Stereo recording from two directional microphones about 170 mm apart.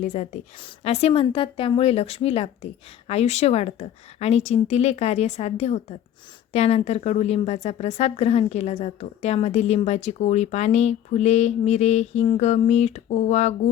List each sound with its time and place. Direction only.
0.0 s a woman's voice: 45° left (ahead or behind)